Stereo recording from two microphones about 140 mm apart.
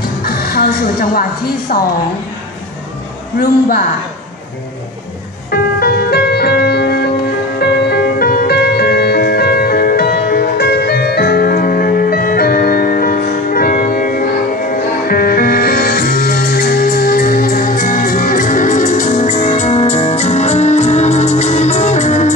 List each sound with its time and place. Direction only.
0.0 s music: 90° left
1.7 s a woman's voice: 90° left
3.3 s a woman's voice: 90° left
5.5 s music: 90° left; by 22.3 s 55° left (ahead or behind)